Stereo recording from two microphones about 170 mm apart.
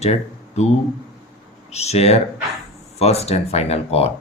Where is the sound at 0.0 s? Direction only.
40° left (ahead or behind).